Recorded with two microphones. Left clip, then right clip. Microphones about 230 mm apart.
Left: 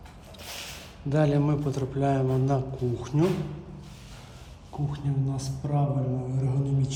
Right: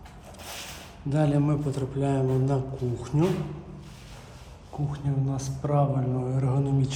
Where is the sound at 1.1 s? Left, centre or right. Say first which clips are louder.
Left 1 dB; centre.